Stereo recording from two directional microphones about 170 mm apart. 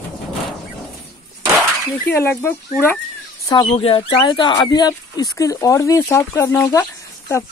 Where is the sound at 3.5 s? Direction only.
30° left (ahead or behind).